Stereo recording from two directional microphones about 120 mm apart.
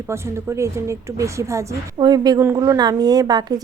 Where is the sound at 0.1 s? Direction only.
20° right (ahead or behind).